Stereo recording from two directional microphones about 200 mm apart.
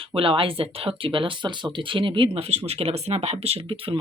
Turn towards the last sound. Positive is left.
turn(degrees=-25)  # may be behind; listen again after turning